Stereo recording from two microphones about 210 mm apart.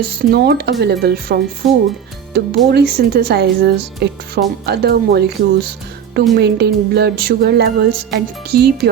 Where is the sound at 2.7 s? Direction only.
50° right (ahead or behind).